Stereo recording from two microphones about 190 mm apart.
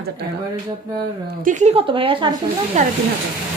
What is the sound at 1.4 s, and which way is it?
Speech, 40° right (ahead or behind).